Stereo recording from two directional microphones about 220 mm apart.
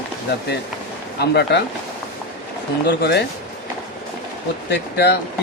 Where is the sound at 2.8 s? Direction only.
50° left (ahead or behind).